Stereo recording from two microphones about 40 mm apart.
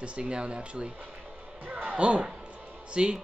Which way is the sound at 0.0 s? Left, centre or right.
Right.